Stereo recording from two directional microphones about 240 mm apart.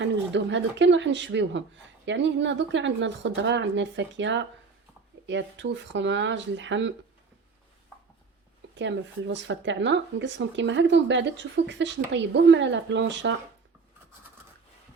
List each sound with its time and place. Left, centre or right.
0.0 s speech: right
8.7 s speech: right